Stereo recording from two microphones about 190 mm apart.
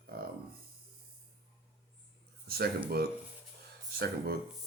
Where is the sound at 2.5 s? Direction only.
55° right (ahead or behind).